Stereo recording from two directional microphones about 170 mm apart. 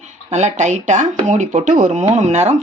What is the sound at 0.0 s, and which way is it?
Speech, 45° right (ahead or behind).